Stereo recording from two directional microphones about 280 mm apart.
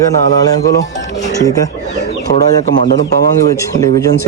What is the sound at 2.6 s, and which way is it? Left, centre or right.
Speech, right.